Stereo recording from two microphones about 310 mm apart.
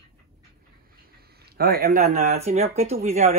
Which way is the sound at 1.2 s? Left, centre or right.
Right.